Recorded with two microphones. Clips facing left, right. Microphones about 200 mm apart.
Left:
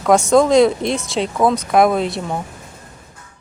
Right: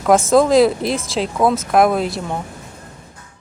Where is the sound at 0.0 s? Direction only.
Centre (ahead or behind).